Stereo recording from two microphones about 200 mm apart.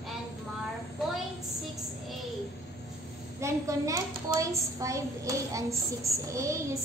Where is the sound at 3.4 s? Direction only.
15° right (ahead or behind).